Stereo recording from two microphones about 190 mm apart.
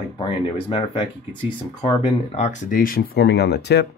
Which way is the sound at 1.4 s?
25° left (ahead or behind).